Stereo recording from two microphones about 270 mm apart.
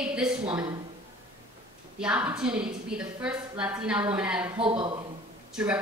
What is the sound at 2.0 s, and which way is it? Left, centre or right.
A woman's voice, centre.